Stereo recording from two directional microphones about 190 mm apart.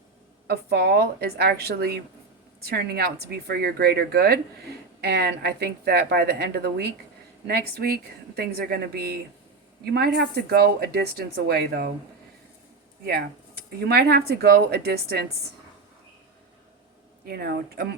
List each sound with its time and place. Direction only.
0.4 s speech: 55° right (ahead or behind)
13.8 s speech: 55° right (ahead or behind)
17.2 s speech: 55° right (ahead or behind)